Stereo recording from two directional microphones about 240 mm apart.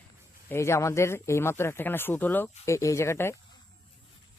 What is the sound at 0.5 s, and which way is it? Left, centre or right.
Speech, centre.